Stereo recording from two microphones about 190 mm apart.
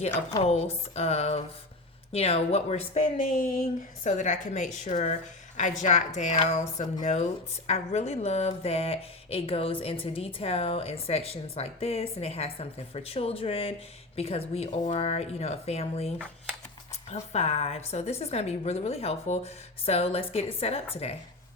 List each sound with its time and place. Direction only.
0.1 s speech: 20° left (ahead or behind)
0.4 s speech: 35° left (ahead or behind)